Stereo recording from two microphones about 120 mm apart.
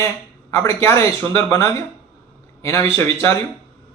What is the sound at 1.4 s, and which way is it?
Speech, 25° left (ahead or behind).